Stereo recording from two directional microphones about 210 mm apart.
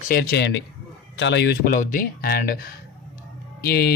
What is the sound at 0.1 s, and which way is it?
Speech, 50° left (ahead or behind).